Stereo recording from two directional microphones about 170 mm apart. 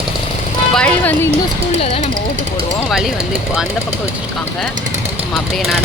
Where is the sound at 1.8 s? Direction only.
35° left (ahead or behind).